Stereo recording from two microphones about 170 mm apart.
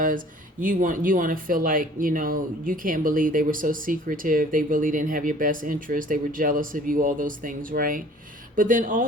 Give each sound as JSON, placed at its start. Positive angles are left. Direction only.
{"t": 0.6, "sound": "speech", "side_deg": -50}